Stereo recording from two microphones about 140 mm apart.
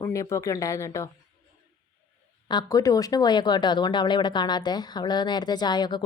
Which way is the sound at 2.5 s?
30° left (ahead or behind).